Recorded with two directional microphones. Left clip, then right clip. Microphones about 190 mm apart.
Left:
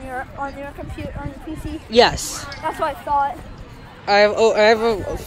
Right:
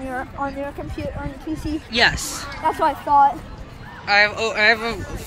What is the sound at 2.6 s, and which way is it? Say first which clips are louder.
Speech: right 4 dB; 35° right (ahead or behind).